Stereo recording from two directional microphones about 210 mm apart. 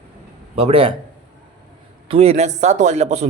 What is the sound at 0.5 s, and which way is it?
Speech, 30° right (ahead or behind).